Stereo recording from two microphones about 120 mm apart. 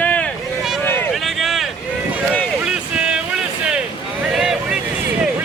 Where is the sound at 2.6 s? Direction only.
5° right (ahead or behind).